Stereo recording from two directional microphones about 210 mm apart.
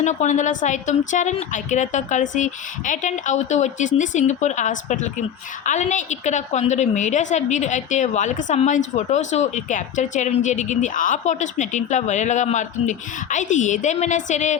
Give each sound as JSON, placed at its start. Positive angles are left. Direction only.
{"t": 0.0, "sound": "speech", "side_deg": 35}